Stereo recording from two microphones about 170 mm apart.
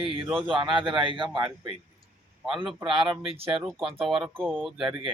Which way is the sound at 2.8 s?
30° right (ahead or behind).